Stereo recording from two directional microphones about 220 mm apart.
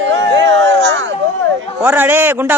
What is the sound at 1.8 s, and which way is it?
Speech, 10° right (ahead or behind).